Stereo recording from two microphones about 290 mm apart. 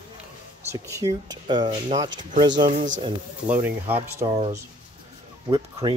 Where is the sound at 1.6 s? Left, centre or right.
Right.